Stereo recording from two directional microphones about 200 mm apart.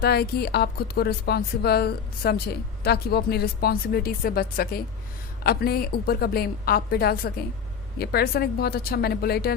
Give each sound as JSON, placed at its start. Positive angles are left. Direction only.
{"t": 0.0, "sound": "speech", "side_deg": 50}